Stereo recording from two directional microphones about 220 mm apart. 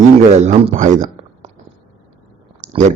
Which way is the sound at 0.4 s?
30° right (ahead or behind).